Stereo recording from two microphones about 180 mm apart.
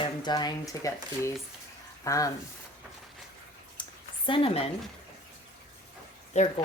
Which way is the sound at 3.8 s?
25° left (ahead or behind).